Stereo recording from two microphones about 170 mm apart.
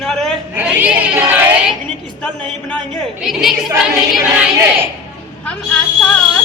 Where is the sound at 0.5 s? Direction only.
10° right (ahead or behind).